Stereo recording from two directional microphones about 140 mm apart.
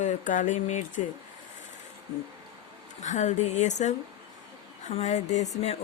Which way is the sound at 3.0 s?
60° left (ahead or behind).